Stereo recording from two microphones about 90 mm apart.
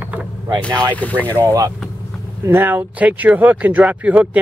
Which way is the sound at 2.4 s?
20° right (ahead or behind).